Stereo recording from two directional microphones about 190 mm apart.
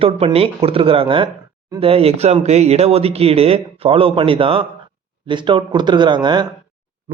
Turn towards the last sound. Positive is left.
turn(degrees=-25)  # may be behind; listen again after turning